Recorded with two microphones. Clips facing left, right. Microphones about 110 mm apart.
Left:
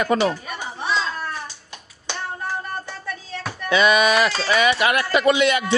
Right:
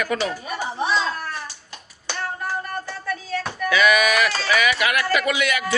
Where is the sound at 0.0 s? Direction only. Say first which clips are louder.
Left 5 dB; 30° left (ahead or behind).